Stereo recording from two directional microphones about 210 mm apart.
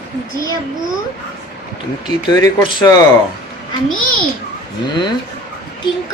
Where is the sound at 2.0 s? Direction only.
15° left (ahead or behind).